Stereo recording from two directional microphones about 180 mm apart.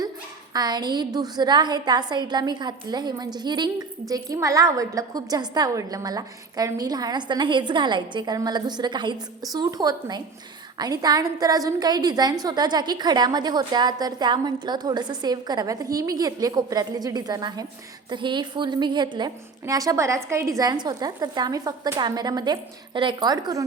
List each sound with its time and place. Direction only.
0.5 s a woman's voice: 20° right (ahead or behind)